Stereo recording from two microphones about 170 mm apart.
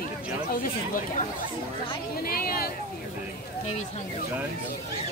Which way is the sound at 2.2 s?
60° left (ahead or behind).